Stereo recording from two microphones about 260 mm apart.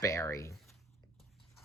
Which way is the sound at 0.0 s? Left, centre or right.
Centre.